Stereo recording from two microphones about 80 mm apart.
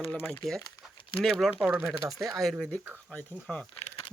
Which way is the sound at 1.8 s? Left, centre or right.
Centre.